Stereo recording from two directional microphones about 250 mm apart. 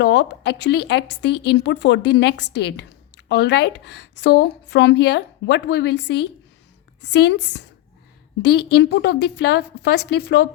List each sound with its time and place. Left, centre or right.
0.0 s a woman's voice: left